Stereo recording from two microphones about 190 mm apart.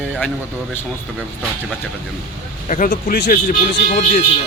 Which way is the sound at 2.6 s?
45° left (ahead or behind).